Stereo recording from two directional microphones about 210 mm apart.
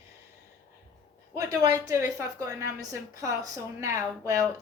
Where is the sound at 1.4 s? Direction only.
15° right (ahead or behind).